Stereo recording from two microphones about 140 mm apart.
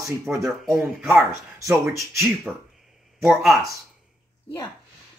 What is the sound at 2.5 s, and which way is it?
Speech, 5° right (ahead or behind).